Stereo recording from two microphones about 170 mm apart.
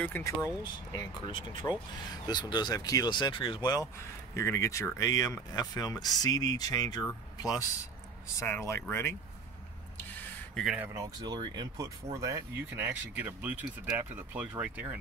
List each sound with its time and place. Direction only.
0.2 s speech: 10° left (ahead or behind)
0.9 s speech: 30° left (ahead or behind); by 9.1 s 15° left (ahead or behind)
9.9 s a sound: 10° left (ahead or behind)
10.6 s speech: 5° right (ahead or behind)
10.9 s speech: 20° right (ahead or behind)